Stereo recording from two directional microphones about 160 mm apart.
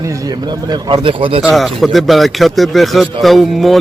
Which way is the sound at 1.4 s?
5° right (ahead or behind).